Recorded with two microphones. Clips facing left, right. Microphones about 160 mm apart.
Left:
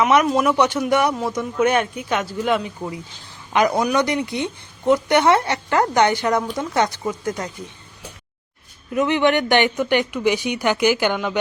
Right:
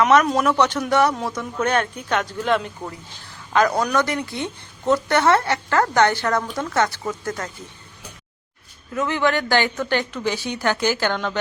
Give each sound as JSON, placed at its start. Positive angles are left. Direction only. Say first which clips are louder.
{"t": 0.3, "sound": "speech", "louder": "left 1 dB", "side_deg": 5}
{"t": 8.9, "sound": "speech", "louder": "left 4 dB", "side_deg": 20}